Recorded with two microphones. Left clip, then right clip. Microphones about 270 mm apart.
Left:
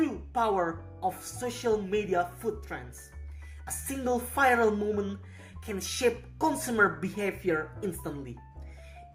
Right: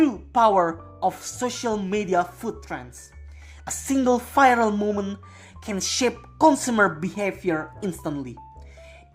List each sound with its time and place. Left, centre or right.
0.0 s speech: right